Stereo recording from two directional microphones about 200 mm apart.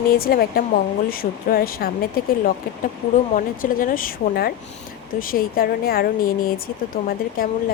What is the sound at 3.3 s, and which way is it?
Speech, 45° left (ahead or behind).